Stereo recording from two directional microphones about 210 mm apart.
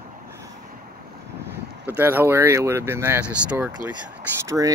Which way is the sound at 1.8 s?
10° right (ahead or behind).